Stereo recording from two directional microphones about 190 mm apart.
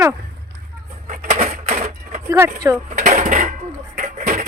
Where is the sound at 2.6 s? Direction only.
15° right (ahead or behind).